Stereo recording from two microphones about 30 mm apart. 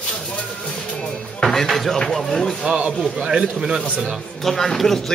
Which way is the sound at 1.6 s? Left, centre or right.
Centre.